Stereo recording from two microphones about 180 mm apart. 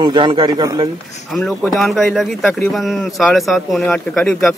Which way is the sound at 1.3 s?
5° left (ahead or behind).